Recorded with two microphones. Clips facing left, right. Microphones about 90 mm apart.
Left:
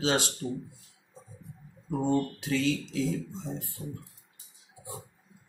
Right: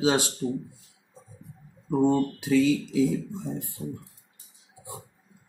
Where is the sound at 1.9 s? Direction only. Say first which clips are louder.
Right 5 dB; 15° right (ahead or behind).